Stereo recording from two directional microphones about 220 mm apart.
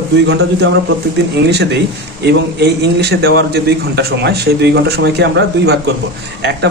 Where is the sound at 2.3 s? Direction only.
50° right (ahead or behind).